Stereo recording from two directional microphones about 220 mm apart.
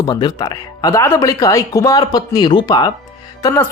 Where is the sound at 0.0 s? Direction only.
20° left (ahead or behind).